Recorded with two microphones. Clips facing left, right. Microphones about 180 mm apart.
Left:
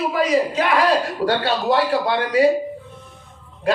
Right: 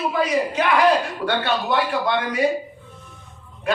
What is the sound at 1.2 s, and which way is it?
A man's voice, 35° left (ahead or behind).